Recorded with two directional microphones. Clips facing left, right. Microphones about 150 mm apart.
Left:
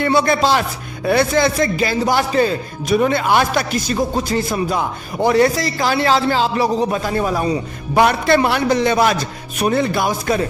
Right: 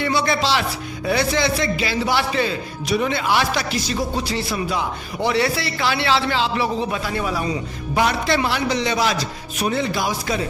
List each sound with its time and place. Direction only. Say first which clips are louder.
0.0 s a man's voice: left 5 dB; 50° left (ahead or behind)
7.9 s a man's voice: left 6 dB; 55° left (ahead or behind)